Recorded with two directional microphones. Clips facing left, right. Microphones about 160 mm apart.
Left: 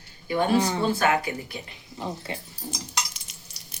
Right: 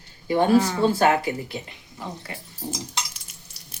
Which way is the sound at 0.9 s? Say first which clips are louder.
Right 4 dB; 30° right (ahead or behind).